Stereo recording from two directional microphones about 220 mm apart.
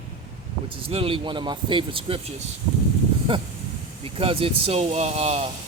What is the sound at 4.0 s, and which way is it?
Speech, 25° right (ahead or behind).